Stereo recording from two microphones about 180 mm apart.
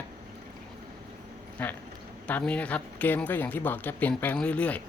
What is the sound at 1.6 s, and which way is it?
Speech, 10° left (ahead or behind).